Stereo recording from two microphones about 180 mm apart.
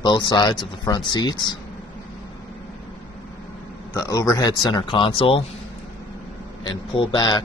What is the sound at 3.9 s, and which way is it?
Speech, 20° left (ahead or behind).